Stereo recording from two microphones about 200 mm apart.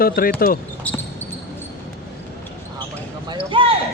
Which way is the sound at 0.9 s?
5° left (ahead or behind).